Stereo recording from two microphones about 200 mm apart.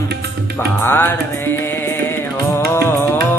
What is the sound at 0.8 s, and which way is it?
Music, 10° left (ahead or behind).